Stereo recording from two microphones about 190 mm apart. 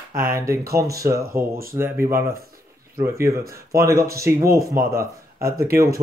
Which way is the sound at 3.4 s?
50° right (ahead or behind).